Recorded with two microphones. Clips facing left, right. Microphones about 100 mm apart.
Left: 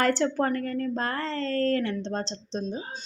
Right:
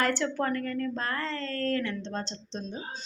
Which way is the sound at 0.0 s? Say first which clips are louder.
Left 4 dB; 40° left (ahead or behind).